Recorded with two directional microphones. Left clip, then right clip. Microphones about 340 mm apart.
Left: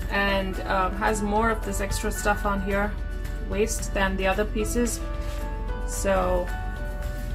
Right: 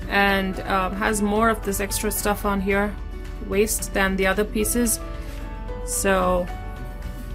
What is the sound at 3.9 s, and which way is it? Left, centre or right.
Speech, right.